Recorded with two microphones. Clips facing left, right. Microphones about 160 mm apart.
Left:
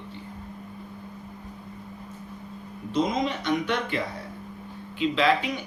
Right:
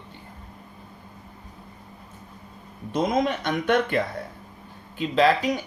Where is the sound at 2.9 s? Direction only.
55° right (ahead or behind).